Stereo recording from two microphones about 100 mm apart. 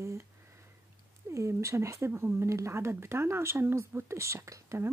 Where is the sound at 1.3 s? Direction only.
30° right (ahead or behind).